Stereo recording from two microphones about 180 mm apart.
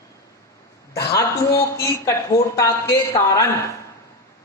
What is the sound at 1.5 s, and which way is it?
A woman's voice, 15° left (ahead or behind).